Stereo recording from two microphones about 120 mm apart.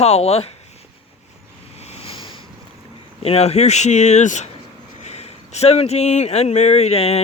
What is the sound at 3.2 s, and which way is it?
Speech, 60° left (ahead or behind).